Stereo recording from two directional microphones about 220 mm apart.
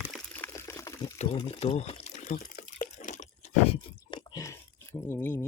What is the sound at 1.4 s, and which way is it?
Water, 25° left (ahead or behind).